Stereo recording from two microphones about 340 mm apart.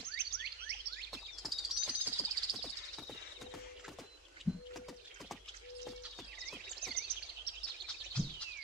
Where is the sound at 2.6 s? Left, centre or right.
Centre.